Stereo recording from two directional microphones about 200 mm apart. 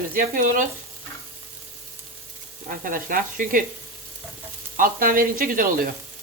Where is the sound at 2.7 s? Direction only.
45° right (ahead or behind).